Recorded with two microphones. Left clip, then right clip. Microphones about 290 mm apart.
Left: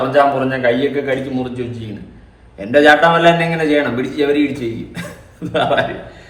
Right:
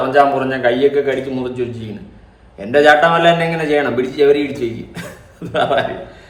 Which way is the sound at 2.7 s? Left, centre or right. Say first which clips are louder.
Even; centre.